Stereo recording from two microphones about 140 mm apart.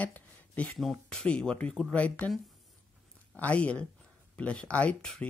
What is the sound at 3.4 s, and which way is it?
Speech, 10° left (ahead or behind).